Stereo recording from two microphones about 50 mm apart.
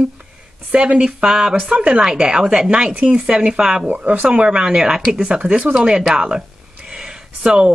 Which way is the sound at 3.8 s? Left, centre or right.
Right.